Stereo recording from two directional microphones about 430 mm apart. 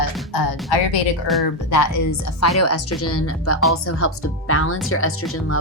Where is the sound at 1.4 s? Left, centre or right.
Left.